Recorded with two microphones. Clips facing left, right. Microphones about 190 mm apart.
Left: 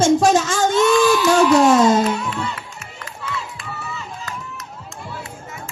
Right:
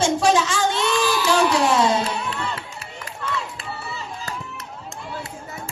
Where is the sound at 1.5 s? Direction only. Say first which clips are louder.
Left 6 dB; 45° left (ahead or behind).